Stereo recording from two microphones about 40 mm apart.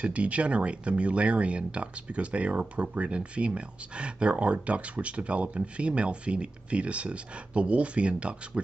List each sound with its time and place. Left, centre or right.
0.0 s speech: right